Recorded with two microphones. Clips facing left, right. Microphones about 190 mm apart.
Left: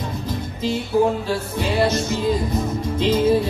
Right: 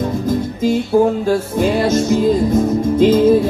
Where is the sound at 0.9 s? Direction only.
50° right (ahead or behind).